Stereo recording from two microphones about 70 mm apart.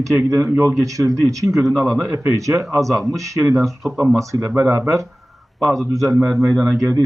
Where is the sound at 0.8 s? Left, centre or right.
Right.